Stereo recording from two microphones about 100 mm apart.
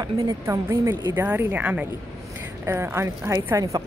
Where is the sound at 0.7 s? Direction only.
25° right (ahead or behind).